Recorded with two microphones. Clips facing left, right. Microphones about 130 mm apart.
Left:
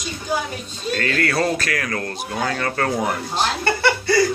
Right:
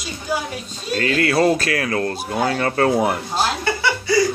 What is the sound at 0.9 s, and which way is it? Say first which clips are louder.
Speech: right 1 dB; 45° left (ahead or behind).